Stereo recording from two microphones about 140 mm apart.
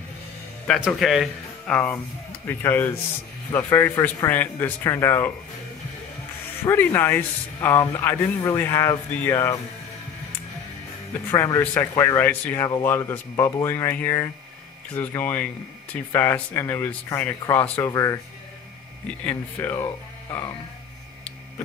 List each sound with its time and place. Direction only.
0.8 s speech: centre (ahead or behind)
2.4 s speech: 15° left (ahead or behind)
6.6 s speech: 15° left (ahead or behind)
11.2 s speech: 20° left (ahead or behind)
19.2 s speech: 15° left (ahead or behind)